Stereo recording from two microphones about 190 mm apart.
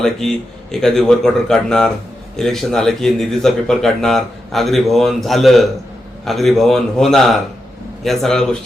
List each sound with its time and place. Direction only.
0.0 s speech: 5° left (ahead or behind)